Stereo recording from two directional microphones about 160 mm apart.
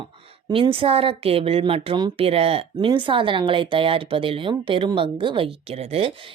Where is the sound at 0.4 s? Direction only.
30° right (ahead or behind).